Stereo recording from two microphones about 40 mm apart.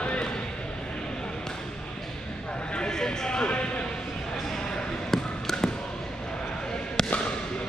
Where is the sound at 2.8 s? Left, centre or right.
Centre.